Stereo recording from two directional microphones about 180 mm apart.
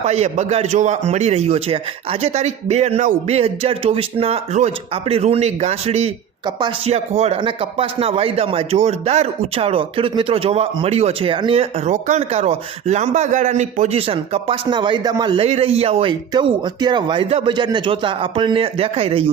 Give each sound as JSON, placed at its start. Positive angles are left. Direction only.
{"t": 0.0, "sound": "speech", "side_deg": -40}